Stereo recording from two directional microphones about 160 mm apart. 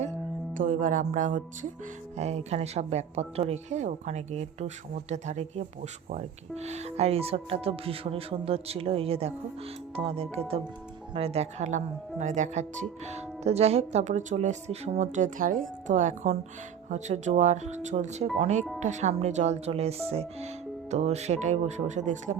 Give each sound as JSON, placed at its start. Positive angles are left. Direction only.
{"t": 0.5, "sound": "speech", "side_deg": -55}
{"t": 2.1, "sound": "a woman's voice", "side_deg": -45}